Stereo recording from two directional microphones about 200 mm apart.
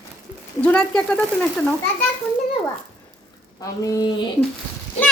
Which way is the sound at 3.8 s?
15° left (ahead or behind).